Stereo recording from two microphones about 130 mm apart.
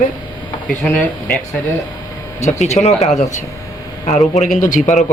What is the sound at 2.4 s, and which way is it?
Speech, 60° left (ahead or behind).